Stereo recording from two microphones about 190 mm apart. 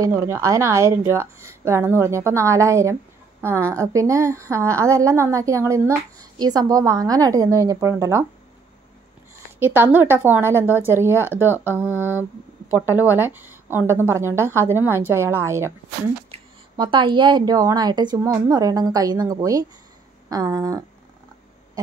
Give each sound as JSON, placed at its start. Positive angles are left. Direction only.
{"t": 0.0, "sound": "a woman's voice", "side_deg": -15}
{"t": 9.6, "sound": "a woman's voice", "side_deg": -10}
{"t": 12.6, "sound": "a woman's voice", "side_deg": -10}
{"t": 16.3, "sound": "a woman's voice", "side_deg": -25}